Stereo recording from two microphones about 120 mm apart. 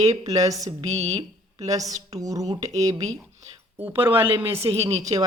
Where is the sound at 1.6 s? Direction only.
30° right (ahead or behind).